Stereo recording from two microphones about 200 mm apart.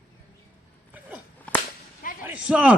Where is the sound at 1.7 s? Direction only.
45° left (ahead or behind).